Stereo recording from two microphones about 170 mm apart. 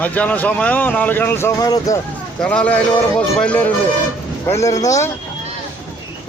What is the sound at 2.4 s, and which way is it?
Speech, 10° left (ahead or behind).